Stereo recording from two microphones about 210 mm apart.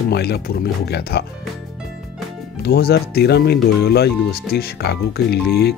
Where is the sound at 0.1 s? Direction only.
50° left (ahead or behind).